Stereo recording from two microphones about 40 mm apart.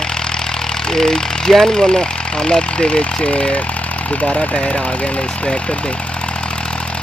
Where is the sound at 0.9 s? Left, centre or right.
Centre.